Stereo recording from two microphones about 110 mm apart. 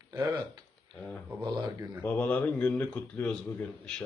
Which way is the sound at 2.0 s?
15° left (ahead or behind).